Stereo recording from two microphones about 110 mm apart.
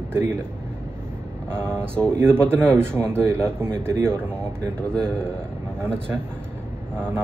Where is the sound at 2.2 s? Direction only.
20° right (ahead or behind).